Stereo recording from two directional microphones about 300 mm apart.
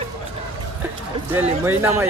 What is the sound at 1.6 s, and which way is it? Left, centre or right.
Speech, centre.